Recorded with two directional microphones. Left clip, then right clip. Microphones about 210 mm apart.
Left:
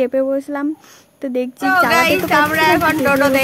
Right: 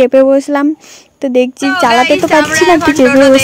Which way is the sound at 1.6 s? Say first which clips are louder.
Right 2 dB; centre (ahead or behind).